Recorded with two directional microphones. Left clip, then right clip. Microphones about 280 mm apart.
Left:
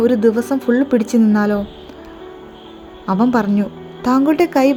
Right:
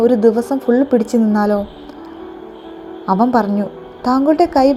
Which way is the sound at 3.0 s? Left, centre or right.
Centre.